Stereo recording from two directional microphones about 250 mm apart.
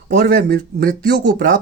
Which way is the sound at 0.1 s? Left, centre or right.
Right.